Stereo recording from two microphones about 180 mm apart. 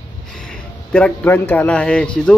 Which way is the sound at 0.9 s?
10° left (ahead or behind).